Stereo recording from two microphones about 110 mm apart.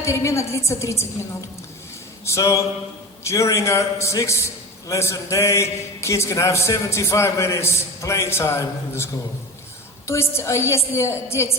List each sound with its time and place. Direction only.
0.0 s a man's voice: 25° left (ahead or behind)
10.1 s a man's voice: 25° left (ahead or behind)